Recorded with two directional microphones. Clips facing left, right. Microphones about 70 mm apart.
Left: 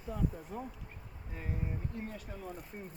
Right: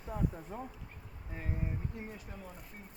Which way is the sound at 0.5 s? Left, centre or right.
Right.